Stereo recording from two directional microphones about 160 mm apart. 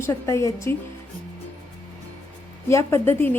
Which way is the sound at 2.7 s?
15° left (ahead or behind).